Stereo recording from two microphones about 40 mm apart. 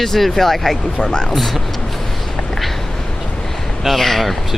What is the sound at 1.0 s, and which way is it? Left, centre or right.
Speech, left.